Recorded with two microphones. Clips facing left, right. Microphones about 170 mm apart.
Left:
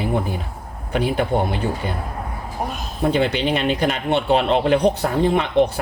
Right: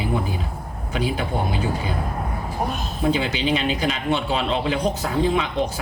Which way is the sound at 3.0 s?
55° left (ahead or behind).